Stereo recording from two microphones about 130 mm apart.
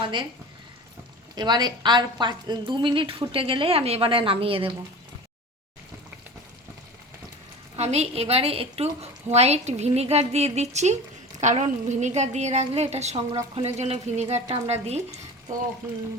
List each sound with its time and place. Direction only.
0.0 s a woman's voice: 40° right (ahead or behind)
1.4 s a woman's voice: 35° right (ahead or behind)
7.8 s a woman's voice: 55° right (ahead or behind)